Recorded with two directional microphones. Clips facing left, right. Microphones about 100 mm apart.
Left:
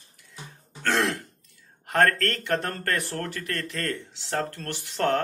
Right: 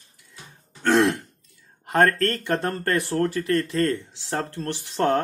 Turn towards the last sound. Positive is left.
turn(degrees=-25)  # may be behind; listen again after turning